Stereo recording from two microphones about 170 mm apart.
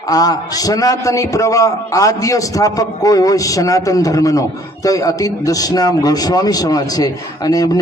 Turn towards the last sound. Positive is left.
turn(degrees=20)  # may be behind; listen again after turning